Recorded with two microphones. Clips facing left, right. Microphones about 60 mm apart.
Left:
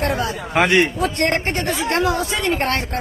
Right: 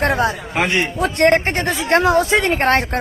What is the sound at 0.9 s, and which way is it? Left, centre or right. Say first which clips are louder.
Speech: right 5 dB; right.